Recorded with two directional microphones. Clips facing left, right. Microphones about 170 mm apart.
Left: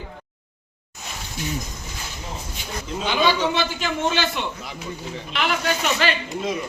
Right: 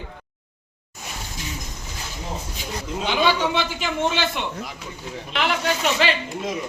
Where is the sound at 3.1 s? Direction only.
15° right (ahead or behind).